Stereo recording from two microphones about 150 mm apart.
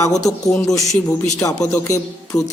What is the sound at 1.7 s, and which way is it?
Speech, 20° left (ahead or behind).